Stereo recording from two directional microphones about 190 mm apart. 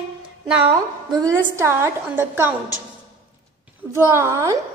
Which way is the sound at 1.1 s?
15° right (ahead or behind).